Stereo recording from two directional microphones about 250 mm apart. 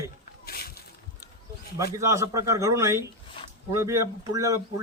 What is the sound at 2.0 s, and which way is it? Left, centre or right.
Speech, centre.